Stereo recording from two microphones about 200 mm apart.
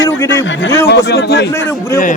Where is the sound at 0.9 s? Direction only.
55° left (ahead or behind).